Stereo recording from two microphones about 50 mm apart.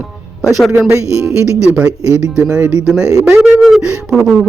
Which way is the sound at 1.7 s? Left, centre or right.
Right.